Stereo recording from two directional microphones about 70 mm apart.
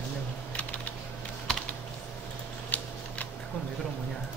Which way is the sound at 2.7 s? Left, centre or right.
Left.